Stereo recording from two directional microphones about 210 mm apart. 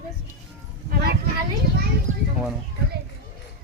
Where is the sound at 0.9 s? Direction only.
50° right (ahead or behind).